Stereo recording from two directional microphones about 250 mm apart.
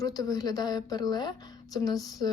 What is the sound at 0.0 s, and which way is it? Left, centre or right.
A woman's voice, centre.